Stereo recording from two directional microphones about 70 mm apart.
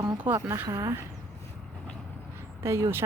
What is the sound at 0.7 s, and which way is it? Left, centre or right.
Speech, right.